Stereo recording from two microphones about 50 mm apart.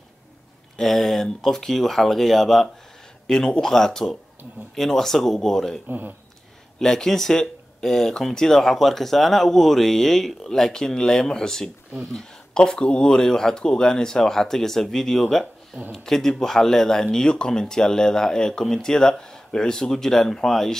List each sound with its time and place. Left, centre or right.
0.7 s speech: centre
5.9 s speech: right
6.8 s speech: centre